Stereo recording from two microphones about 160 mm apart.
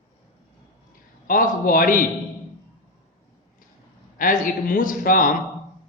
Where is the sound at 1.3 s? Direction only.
60° left (ahead or behind).